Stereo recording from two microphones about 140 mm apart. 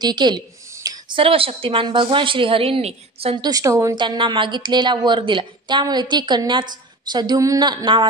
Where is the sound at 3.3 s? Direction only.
30° right (ahead or behind).